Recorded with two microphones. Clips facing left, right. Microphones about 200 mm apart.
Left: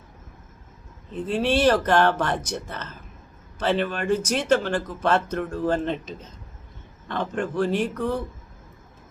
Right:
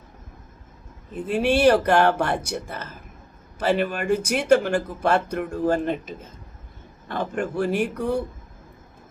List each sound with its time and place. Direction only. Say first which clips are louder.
1.1 s speech: right 1 dB; 10° right (ahead or behind)